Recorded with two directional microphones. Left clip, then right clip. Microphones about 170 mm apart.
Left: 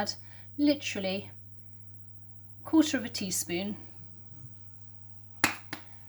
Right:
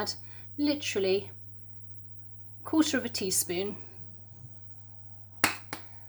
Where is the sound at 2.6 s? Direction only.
25° right (ahead or behind).